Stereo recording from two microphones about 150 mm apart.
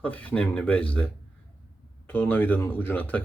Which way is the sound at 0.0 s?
10° left (ahead or behind).